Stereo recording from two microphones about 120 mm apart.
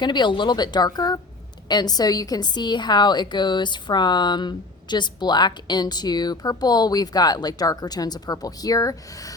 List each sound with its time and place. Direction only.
0.0 s a woman's voice: 40° left (ahead or behind)